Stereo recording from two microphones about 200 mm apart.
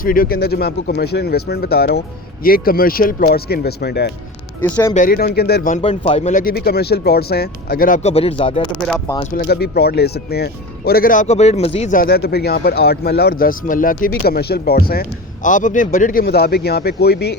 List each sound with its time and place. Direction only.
0.0 s speech: 45° left (ahead or behind)
4.6 s speech: 10° left (ahead or behind)
4.9 s speech: 45° left (ahead or behind)
5.7 s speech: 25° left (ahead or behind)
9.3 s speech: 50° left (ahead or behind)
16.2 s speech: 55° left (ahead or behind)